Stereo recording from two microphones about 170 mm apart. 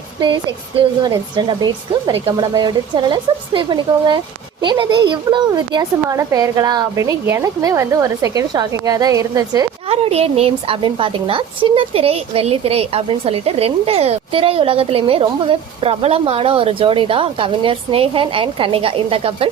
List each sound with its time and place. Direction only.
0.2 s a woman's voice: 25° right (ahead or behind)
9.9 s a woman's voice: 35° right (ahead or behind)